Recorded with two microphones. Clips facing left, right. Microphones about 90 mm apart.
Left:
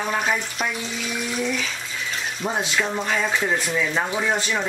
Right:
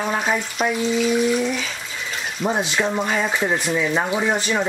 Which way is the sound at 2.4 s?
5° right (ahead or behind).